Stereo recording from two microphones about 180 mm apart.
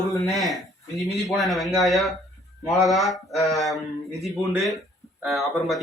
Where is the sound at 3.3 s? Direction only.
20° left (ahead or behind).